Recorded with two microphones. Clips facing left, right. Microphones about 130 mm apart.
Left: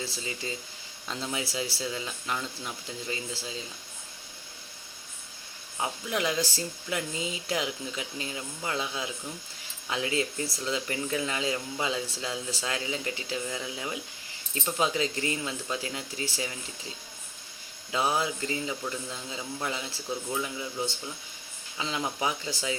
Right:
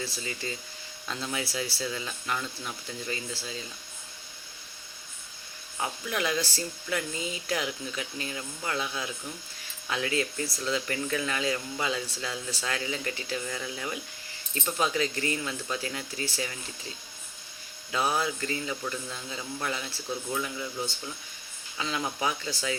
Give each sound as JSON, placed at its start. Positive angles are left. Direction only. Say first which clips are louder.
{"t": 0.0, "sound": "speech", "louder": "even", "side_deg": 20}
{"t": 5.7, "sound": "speech", "louder": "left 1 dB", "side_deg": 20}
{"t": 17.9, "sound": "speech", "louder": "even", "side_deg": 20}